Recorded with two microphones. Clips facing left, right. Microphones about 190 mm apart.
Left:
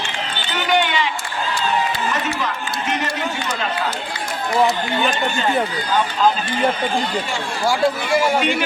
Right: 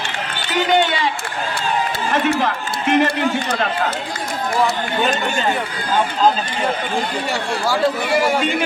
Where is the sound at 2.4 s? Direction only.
55° right (ahead or behind).